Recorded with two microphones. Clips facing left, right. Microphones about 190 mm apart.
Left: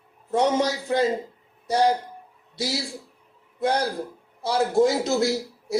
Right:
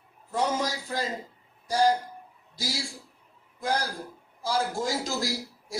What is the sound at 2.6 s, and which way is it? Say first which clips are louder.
A man's voice: left 6 dB; 65° left (ahead or behind).